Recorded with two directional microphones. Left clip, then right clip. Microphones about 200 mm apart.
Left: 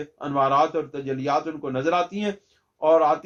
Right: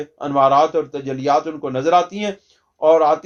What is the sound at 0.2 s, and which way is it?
Speech, 40° right (ahead or behind).